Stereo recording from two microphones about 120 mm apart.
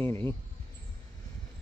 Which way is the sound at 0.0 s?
20° left (ahead or behind).